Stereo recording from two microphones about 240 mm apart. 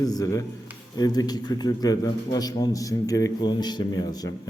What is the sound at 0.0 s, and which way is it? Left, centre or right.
A man's voice, centre.